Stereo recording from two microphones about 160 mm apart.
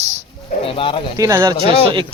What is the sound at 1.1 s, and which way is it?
Speech, 20° right (ahead or behind).